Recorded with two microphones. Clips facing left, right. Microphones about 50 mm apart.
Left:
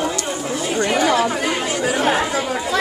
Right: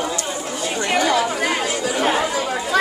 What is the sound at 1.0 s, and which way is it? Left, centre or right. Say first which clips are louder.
Chatter: left 1 dB; left.